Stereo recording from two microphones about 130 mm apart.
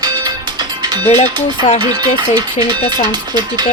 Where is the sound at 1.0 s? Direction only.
55° left (ahead or behind).